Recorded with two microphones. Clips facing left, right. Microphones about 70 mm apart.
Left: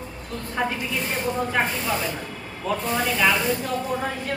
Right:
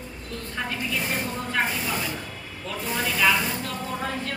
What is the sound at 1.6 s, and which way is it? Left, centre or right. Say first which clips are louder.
Speech: left 2 dB; centre.